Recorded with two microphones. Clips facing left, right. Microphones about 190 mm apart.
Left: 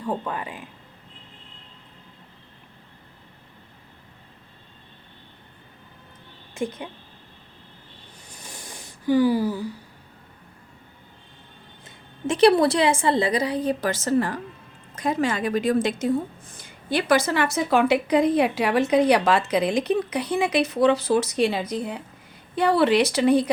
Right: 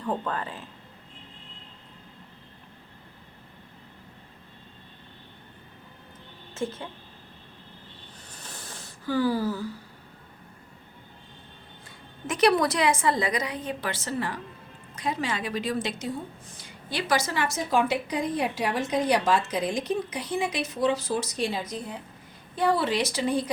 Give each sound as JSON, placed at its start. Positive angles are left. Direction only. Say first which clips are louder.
{"t": 0.0, "sound": "speech", "louder": "left 1 dB", "side_deg": 10}
{"t": 6.5, "sound": "a woman's voice", "louder": "left 3 dB", "side_deg": 15}
{"t": 8.3, "sound": "a sound", "louder": "left 2 dB", "side_deg": 10}
{"t": 12.3, "sound": "a woman's voice", "louder": "left 6 dB", "side_deg": 30}